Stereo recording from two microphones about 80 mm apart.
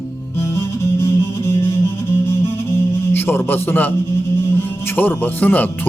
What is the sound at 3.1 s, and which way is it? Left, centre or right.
Speech, left.